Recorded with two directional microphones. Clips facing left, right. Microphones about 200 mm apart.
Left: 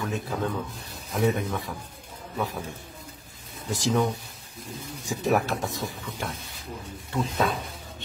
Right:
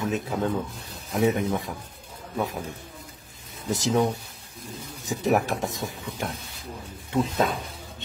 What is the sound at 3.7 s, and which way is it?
Speech, 20° right (ahead or behind).